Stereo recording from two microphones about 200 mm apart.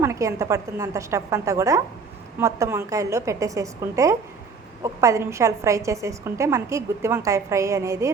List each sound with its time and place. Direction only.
0.0 s a woman's voice: 15° right (ahead or behind)